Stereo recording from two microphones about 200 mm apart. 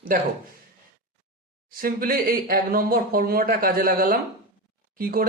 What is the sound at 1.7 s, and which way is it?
Speech, 45° right (ahead or behind).